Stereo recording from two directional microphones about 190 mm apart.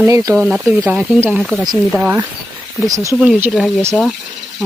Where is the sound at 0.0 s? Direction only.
20° right (ahead or behind).